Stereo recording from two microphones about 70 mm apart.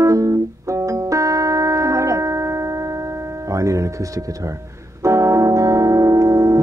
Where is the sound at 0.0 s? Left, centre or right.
Right.